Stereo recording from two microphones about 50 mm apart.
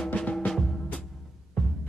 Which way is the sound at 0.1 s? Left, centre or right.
Left.